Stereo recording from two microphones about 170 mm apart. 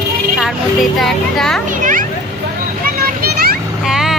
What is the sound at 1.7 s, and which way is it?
Children playing, 50° right (ahead or behind).